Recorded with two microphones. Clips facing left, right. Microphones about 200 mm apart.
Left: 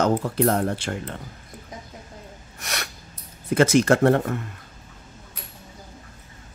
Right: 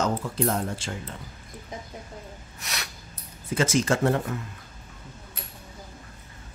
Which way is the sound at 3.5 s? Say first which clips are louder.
Left 6 dB; 60° left (ahead or behind).